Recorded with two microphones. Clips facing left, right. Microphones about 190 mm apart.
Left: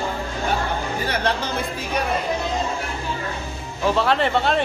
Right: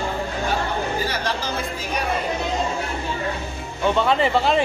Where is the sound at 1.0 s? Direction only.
60° left (ahead or behind).